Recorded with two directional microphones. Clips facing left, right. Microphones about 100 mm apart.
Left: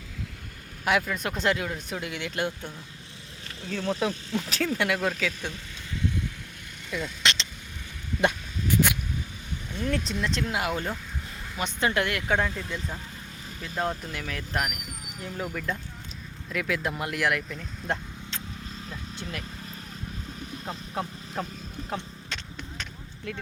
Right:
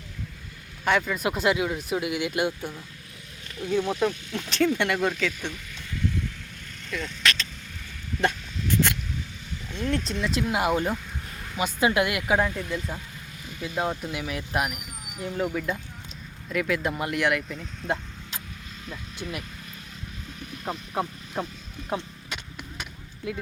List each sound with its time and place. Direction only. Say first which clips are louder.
0.9 s speech: right 2 dB; 5° left (ahead or behind)
7.2 s speech: right 2 dB; 25° left (ahead or behind)
8.2 s a sound: even; 15° left (ahead or behind)
9.7 s speech: right 1 dB; 5° left (ahead or behind)
10.4 s speech: right 4 dB; 20° right (ahead or behind)
15.2 s speech: right 6 dB; 5° right (ahead or behind)
21.8 s a sound: right 4 dB; 15° right (ahead or behind)